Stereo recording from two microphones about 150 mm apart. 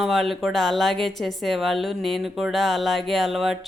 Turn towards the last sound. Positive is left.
turn(degrees=0)  # may be behind; listen again after turning